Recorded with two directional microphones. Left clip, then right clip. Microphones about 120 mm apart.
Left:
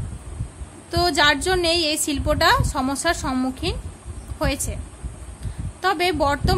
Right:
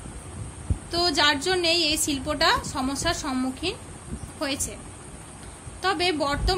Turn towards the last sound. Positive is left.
turn(degrees=35)  # may be behind; listen again after turning